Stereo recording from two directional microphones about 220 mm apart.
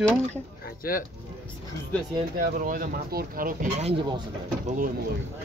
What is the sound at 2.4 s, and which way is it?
Speech, 40° right (ahead or behind).